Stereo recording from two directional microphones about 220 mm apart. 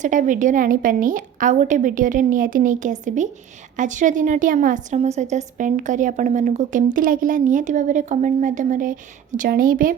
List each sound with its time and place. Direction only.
0.0 s a woman's voice: 35° right (ahead or behind)